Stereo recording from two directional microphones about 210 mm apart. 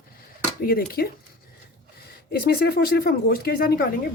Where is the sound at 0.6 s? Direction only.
45° left (ahead or behind).